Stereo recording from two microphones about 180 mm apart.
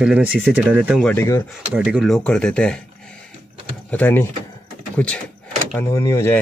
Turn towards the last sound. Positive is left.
turn(degrees=15)  # may be behind; listen again after turning